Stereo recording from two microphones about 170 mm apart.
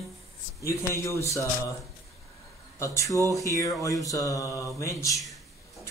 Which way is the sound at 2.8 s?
20° left (ahead or behind).